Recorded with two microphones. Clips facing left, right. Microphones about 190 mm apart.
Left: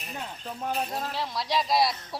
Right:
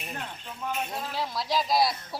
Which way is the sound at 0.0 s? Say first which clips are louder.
Left 1 dB; 35° left (ahead or behind).